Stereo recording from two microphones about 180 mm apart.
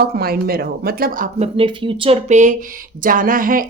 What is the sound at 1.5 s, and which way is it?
Speech, 25° right (ahead or behind).